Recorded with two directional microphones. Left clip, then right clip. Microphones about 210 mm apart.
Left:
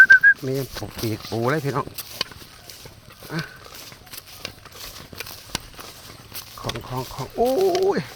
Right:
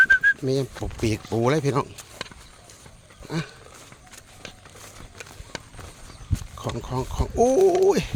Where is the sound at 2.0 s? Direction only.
50° left (ahead or behind).